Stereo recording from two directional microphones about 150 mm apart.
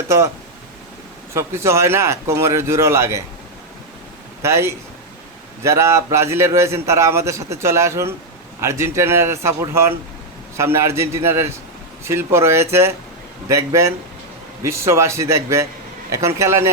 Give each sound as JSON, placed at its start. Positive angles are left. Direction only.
{"t": 1.3, "sound": "a man's voice", "side_deg": -20}
{"t": 4.4, "sound": "a man's voice", "side_deg": -20}